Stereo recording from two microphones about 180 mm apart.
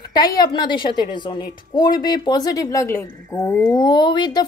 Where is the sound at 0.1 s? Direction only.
20° left (ahead or behind).